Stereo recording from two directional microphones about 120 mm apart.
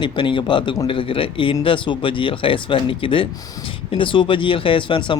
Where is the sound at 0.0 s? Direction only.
40° left (ahead or behind).